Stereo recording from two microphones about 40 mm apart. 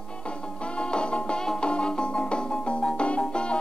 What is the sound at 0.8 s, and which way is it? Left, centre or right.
Music, left.